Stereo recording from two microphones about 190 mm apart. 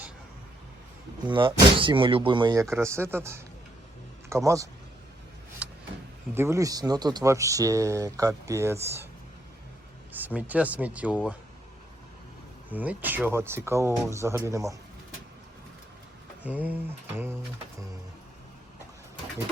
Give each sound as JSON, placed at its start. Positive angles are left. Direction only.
{"t": 1.3, "sound": "speech", "side_deg": -25}
{"t": 5.6, "sound": "a sound", "side_deg": -5}
{"t": 6.3, "sound": "speech", "side_deg": -15}
{"t": 10.1, "sound": "speech", "side_deg": -10}
{"t": 12.7, "sound": "speech", "side_deg": -10}
{"t": 16.4, "sound": "speech", "side_deg": -10}